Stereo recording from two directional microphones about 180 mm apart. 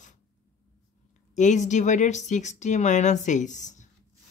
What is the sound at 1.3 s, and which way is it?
Speech, 40° left (ahead or behind).